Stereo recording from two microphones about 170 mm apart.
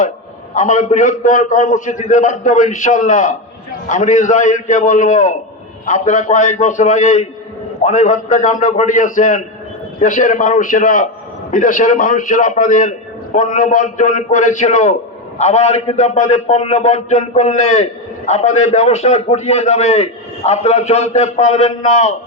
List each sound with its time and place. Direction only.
0.5 s a man's voice: 45° left (ahead or behind)